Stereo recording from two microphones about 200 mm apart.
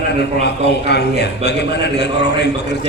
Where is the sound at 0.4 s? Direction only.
55° left (ahead or behind).